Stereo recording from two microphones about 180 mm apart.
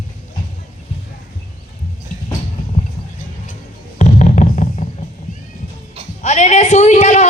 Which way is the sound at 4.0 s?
40° left (ahead or behind).